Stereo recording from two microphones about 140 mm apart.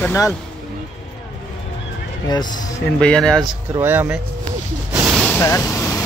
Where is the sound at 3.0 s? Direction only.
5° left (ahead or behind).